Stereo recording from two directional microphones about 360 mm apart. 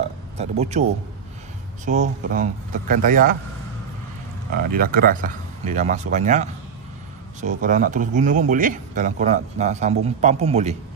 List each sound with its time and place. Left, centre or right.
0.0 s a sound: centre
1.9 s speech: right
4.7 s speech: right